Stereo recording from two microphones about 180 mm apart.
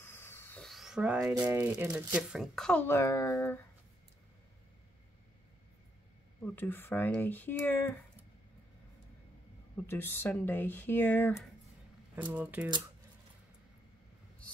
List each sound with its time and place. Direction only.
0.0 s a sound: 15° left (ahead or behind)
0.7 s a sound: centre (ahead or behind)
1.3 s speech: 20° right (ahead or behind); by 3.6 s 15° left (ahead or behind)
6.4 s speech: 10° left (ahead or behind)
9.8 s speech: 10° left (ahead or behind)
12.2 s speech: 10° right (ahead or behind)